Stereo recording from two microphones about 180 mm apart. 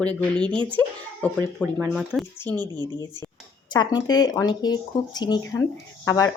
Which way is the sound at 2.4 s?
10° left (ahead or behind).